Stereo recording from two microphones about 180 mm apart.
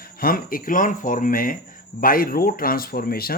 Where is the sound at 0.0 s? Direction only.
55° left (ahead or behind).